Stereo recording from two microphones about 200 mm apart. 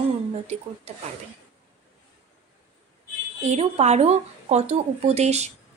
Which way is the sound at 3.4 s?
30° right (ahead or behind).